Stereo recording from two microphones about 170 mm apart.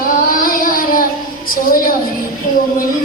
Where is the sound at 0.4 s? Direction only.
55° left (ahead or behind).